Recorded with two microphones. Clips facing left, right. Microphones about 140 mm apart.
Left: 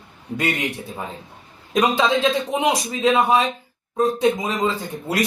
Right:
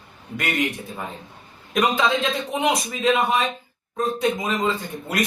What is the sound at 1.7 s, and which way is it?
Speech, 30° left (ahead or behind).